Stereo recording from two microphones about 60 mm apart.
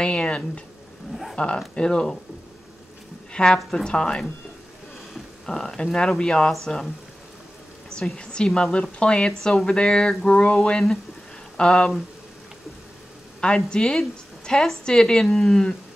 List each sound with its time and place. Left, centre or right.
0.0 s speech: centre
3.5 s speech: centre
8.2 s speech: centre
13.7 s speech: centre